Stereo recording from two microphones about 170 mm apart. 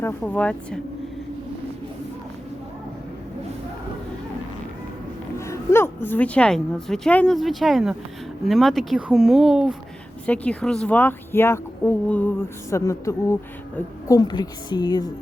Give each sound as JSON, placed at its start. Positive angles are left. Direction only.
{"t": 0.0, "sound": "speech", "side_deg": 10}
{"t": 5.4, "sound": "a woman's voice", "side_deg": 15}
{"t": 10.2, "sound": "a woman's voice", "side_deg": 5}